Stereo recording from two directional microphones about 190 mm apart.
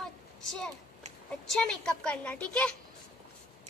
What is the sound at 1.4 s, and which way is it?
A woman's voice, 5° left (ahead or behind).